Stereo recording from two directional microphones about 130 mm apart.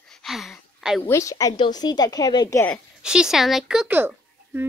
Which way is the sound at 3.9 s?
15° right (ahead or behind).